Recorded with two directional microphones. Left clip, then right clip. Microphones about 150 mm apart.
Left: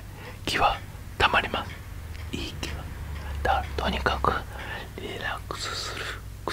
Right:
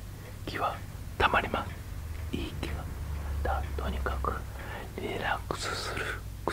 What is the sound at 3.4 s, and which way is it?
Whispering, 25° left (ahead or behind).